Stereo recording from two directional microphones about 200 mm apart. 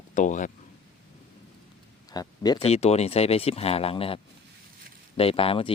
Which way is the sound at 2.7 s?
30° left (ahead or behind).